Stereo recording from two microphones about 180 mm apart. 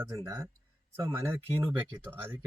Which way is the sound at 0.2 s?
20° right (ahead or behind).